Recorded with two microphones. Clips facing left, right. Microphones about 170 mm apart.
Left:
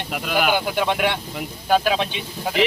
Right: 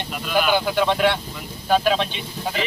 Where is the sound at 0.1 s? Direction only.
65° left (ahead or behind).